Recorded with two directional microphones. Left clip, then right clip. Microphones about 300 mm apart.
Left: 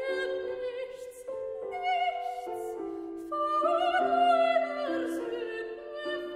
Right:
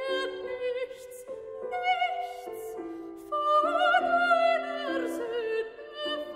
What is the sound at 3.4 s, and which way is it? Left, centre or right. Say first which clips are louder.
Music: right 3 dB; right.